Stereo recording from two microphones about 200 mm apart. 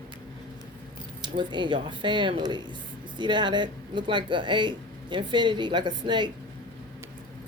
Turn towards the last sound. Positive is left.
turn(degrees=-25)  # may be behind; listen again after turning